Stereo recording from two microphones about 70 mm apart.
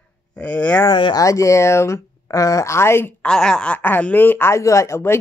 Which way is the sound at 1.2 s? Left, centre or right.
Left.